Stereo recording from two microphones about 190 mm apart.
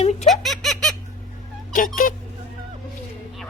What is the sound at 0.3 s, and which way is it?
Giggle, centre (ahead or behind).